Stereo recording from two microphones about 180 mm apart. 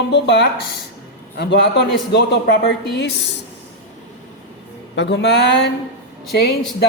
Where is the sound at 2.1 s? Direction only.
70° left (ahead or behind).